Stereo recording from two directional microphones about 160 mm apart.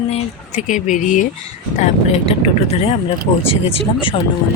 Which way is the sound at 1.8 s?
40° left (ahead or behind).